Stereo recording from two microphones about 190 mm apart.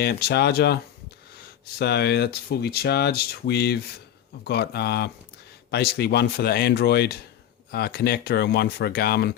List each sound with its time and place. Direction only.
0.0 s speech: 60° left (ahead or behind)
1.8 s speech: 60° left (ahead or behind)